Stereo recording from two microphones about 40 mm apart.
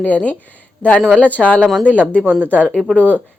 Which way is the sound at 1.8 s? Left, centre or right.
Right.